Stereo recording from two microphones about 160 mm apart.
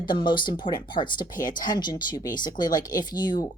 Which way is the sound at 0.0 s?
30° left (ahead or behind).